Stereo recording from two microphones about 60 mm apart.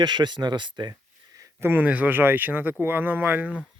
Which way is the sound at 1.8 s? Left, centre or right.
Right.